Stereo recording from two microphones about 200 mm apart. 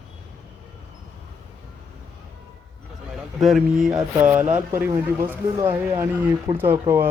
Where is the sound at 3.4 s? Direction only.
Centre (ahead or behind).